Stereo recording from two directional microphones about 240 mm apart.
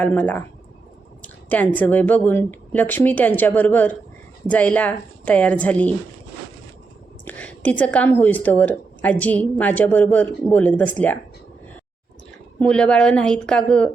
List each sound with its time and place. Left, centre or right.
0.0 s a woman's voice: centre
7.3 s a woman's voice: centre
12.5 s a woman's voice: centre